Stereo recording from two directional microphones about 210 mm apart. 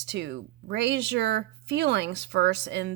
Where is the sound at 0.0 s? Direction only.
55° right (ahead or behind).